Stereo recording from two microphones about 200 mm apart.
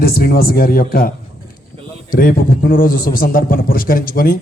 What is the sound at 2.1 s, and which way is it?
A man's voice, 45° left (ahead or behind).